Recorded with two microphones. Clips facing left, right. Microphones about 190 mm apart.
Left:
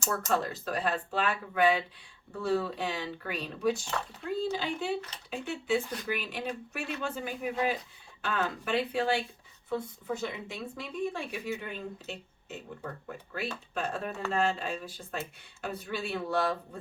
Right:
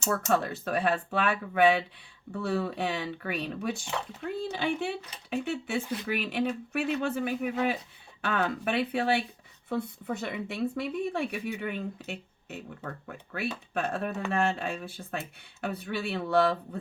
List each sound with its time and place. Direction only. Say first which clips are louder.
0.3 s speech: right 2 dB; 60° right (ahead or behind)